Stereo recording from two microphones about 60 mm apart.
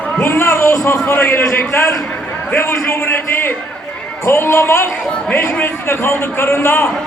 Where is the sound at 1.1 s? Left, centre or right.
Left.